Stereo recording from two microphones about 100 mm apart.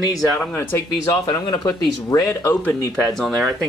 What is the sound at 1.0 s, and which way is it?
Speech, 45° left (ahead or behind).